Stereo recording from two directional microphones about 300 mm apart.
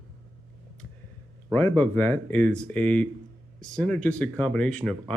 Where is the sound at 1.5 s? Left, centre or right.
Centre.